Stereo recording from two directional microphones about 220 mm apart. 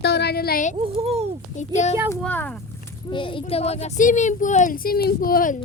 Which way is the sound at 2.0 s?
10° right (ahead or behind).